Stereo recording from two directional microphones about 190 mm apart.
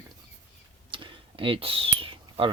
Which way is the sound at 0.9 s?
25° right (ahead or behind).